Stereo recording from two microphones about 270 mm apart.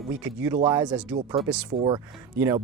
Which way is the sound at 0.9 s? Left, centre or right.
Centre.